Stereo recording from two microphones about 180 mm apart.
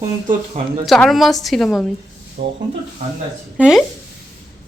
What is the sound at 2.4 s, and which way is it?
Speech, 45° right (ahead or behind).